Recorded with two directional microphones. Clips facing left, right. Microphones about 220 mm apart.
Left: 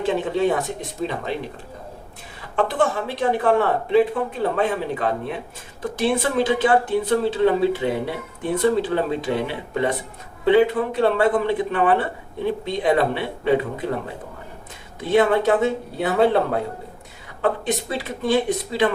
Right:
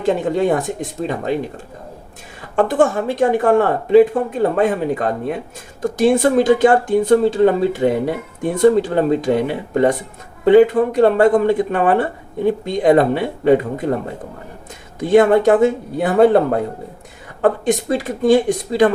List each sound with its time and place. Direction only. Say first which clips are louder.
0.0 s speech: right 4 dB; 45° right (ahead or behind)
2.6 s speech: right 6 dB; 45° right (ahead or behind)
14.9 s speech: right 6 dB; 45° right (ahead or behind)